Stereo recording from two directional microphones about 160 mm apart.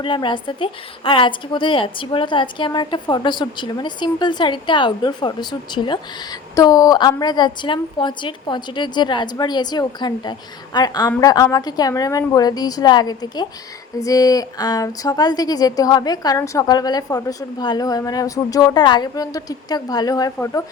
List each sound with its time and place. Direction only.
0.0 s speech: 30° left (ahead or behind)